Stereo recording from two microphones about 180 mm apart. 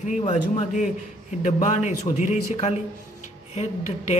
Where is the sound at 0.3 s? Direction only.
40° left (ahead or behind).